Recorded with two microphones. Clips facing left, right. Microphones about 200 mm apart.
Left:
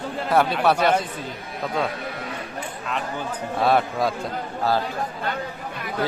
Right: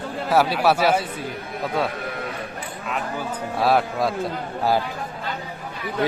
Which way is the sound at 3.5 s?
Centre (ahead or behind).